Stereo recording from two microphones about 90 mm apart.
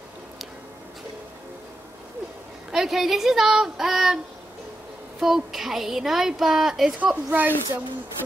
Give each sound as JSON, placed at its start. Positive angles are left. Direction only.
{"t": 2.7, "sound": "speech", "side_deg": -5}
{"t": 5.2, "sound": "speech", "side_deg": -5}
{"t": 7.2, "sound": "speech", "side_deg": -20}